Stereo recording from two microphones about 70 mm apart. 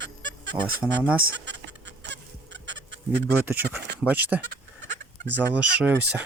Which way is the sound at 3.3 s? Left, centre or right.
Right.